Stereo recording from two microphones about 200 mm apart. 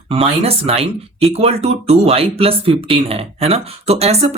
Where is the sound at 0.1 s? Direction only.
30° right (ahead or behind).